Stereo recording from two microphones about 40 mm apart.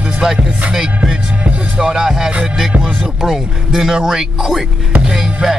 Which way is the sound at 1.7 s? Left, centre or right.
Centre.